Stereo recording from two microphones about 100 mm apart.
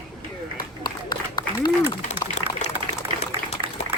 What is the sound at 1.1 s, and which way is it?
Applause, 50° left (ahead or behind).